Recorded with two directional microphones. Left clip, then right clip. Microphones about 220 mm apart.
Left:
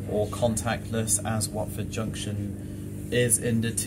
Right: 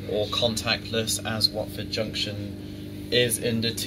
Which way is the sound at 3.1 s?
25° left (ahead or behind).